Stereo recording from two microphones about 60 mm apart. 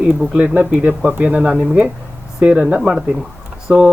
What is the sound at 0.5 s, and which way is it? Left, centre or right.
Speech, right.